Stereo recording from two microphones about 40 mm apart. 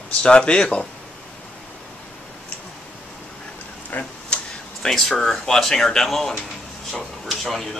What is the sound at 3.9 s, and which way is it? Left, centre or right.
Speech, left.